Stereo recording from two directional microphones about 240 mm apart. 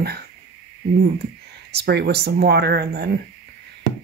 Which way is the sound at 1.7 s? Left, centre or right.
Right.